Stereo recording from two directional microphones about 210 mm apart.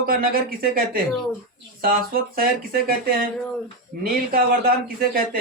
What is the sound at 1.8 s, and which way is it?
Speech, 45° right (ahead or behind).